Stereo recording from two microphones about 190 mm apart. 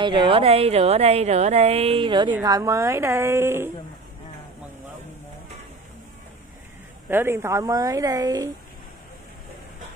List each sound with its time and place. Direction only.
0.0 s a woman's voice: 25° right (ahead or behind)
7.1 s a woman's voice: 10° right (ahead or behind)